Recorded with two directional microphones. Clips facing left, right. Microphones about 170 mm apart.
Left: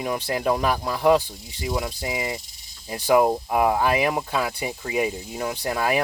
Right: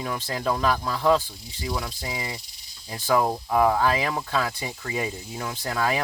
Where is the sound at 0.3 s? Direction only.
15° left (ahead or behind).